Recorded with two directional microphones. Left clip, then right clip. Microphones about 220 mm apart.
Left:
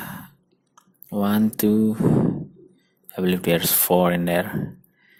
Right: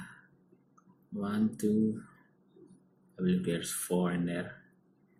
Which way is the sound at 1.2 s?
45° left (ahead or behind).